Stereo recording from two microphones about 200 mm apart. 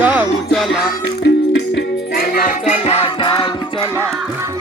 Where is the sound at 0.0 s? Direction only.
5° right (ahead or behind).